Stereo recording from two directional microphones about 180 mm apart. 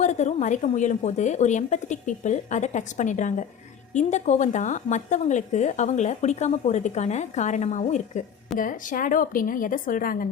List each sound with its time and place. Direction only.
0.0 s a woman's voice: 40° left (ahead or behind)